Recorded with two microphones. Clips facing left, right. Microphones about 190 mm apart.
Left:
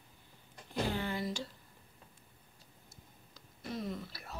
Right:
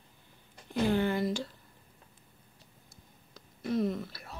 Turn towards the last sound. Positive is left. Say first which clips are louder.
# right 9 dB
turn(degrees=-55)  # may be behind; listen again after turning